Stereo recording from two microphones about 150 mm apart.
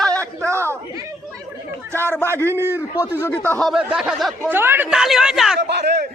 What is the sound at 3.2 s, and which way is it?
Speech, 10° left (ahead or behind).